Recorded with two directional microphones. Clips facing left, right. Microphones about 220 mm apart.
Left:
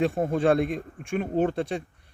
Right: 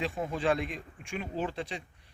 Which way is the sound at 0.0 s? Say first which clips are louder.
Left 8 dB; 50° left (ahead or behind).